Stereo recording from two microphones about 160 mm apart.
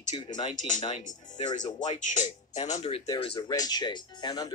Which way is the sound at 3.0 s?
30° left (ahead or behind).